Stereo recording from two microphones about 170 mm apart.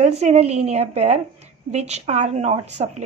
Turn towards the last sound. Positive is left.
turn(degrees=-40)  # may be behind; listen again after turning